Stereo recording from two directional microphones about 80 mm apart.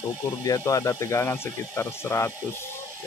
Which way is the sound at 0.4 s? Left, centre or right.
Left.